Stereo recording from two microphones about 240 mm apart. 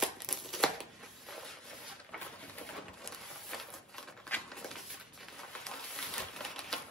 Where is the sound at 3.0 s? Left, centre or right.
Centre.